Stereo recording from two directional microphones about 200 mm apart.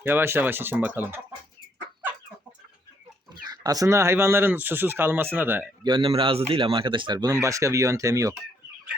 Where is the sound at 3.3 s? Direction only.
20° right (ahead or behind).